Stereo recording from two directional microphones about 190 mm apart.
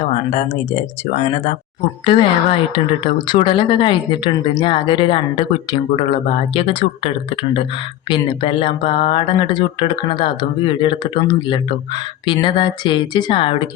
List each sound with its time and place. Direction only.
0.0 s speech: 35° left (ahead or behind)
2.0 s speech: 25° left (ahead or behind)